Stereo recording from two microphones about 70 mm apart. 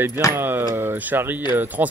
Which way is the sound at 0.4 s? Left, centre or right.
Right.